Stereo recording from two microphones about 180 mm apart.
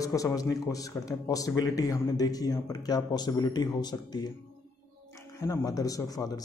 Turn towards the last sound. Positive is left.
turn(degrees=20)  # may be behind; listen again after turning